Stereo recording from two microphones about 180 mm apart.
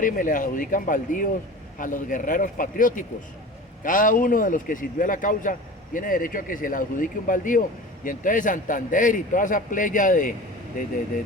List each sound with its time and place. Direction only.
0.0 s speech: 45° left (ahead or behind)